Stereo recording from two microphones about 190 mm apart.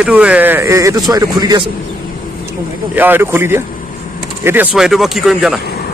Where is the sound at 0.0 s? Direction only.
5° right (ahead or behind).